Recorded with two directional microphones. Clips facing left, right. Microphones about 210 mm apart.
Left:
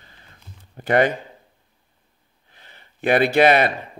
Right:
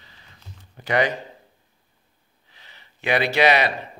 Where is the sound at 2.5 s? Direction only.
50° left (ahead or behind).